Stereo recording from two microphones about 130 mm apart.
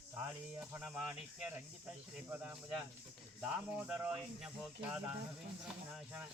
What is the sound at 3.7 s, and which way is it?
Speech, 10° right (ahead or behind).